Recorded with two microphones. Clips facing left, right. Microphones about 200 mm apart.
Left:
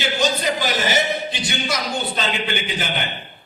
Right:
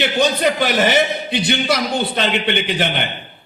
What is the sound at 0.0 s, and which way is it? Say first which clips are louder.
Speech: right 5 dB; 60° right (ahead or behind).